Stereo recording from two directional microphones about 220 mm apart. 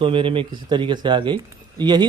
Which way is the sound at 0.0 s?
25° right (ahead or behind).